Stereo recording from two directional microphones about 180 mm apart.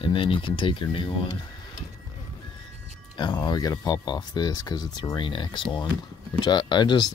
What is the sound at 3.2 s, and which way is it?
Speech, 25° left (ahead or behind).